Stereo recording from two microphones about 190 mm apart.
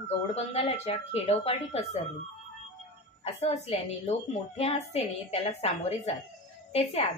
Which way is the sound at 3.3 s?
35° left (ahead or behind).